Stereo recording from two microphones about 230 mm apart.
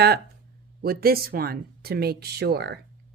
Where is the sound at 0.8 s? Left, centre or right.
Right.